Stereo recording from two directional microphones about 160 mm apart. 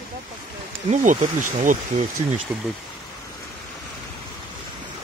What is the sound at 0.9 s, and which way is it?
Speech, 50° right (ahead or behind).